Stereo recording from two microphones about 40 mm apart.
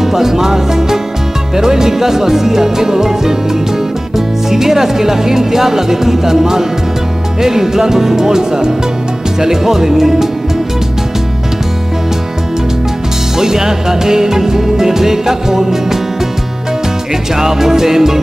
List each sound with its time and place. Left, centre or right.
0.0 s music: centre
4.5 s music: centre
13.4 s music: centre
17.4 s music: centre